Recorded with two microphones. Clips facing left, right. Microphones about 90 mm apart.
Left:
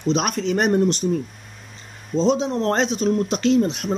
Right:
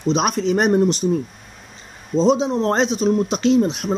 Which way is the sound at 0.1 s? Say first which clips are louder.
Right 3 dB; 25° right (ahead or behind).